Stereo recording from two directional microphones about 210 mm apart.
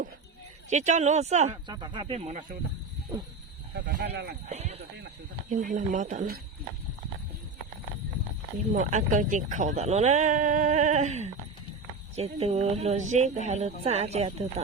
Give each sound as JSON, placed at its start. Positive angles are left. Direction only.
{"t": 0.7, "sound": "speech", "side_deg": -35}
{"t": 1.6, "sound": "speech", "side_deg": -20}
{"t": 3.8, "sound": "speech", "side_deg": -55}
{"t": 4.4, "sound": "speech", "side_deg": -30}
{"t": 8.7, "sound": "speech", "side_deg": -35}